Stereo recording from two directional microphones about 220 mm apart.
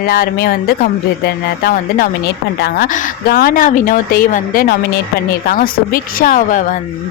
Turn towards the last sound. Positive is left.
turn(degrees=35)  # may be behind; listen again after turning